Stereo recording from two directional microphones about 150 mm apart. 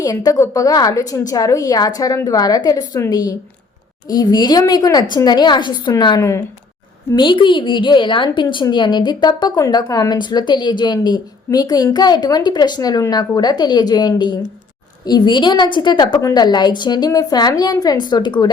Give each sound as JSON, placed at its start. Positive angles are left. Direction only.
{"t": 0.0, "sound": "a woman's voice", "side_deg": 25}
{"t": 7.1, "sound": "a woman's voice", "side_deg": 30}